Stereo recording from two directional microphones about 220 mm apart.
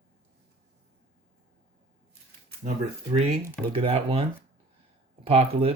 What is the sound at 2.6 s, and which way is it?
Speech, 35° right (ahead or behind).